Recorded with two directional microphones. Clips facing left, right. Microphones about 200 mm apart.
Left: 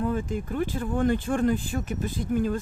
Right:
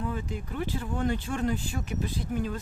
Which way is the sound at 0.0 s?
50° left (ahead or behind).